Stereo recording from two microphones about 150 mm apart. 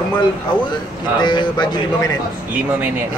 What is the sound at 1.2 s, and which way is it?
Speech, 30° left (ahead or behind).